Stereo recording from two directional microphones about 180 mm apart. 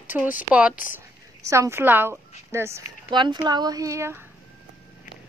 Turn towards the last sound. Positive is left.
turn(degrees=-15)  # may be behind; listen again after turning